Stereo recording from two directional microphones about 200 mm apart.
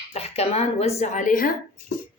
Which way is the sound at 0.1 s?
30° left (ahead or behind).